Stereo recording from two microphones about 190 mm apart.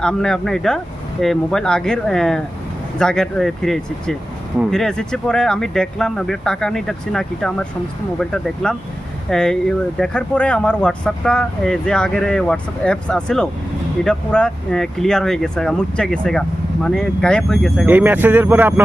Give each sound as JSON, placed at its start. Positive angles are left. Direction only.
{"t": 0.0, "sound": "speech", "side_deg": 5}